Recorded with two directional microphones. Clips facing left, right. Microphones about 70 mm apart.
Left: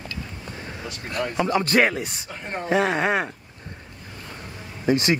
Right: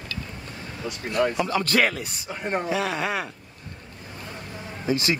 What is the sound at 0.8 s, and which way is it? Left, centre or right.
Speech, centre.